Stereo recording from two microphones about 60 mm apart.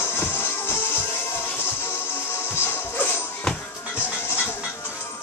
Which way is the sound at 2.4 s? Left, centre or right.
Left.